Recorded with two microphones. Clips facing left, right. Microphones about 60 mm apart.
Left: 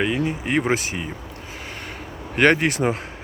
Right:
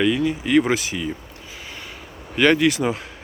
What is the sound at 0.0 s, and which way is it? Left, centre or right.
Speech, left.